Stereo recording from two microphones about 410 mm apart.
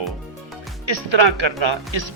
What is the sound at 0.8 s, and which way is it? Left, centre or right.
Speech, right.